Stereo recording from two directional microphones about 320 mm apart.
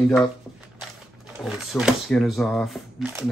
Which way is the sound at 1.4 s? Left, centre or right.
Centre.